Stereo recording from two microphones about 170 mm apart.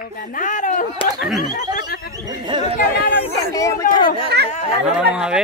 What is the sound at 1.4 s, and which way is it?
Speech, 25° right (ahead or behind).